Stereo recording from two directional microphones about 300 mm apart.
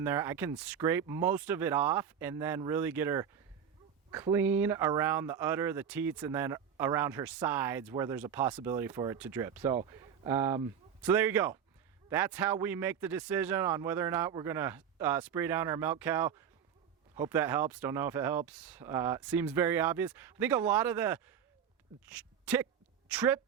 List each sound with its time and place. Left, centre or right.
0.0 s a woman's voice: centre